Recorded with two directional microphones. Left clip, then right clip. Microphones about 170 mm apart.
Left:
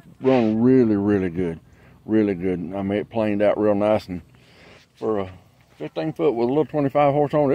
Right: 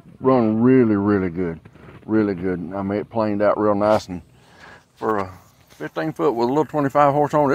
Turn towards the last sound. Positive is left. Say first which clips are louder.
# right 2 dB
turn(degrees=5)  # may be behind; listen again after turning